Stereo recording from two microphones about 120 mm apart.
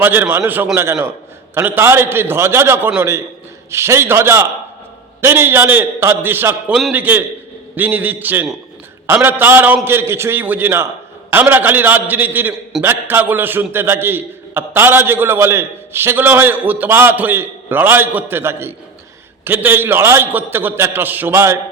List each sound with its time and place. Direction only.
0.0 s a man's voice: 15° right (ahead or behind)